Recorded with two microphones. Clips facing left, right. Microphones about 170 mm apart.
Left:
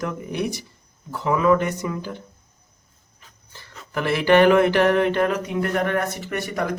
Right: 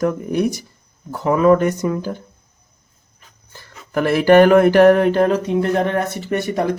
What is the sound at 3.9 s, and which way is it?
Speech, 45° right (ahead or behind).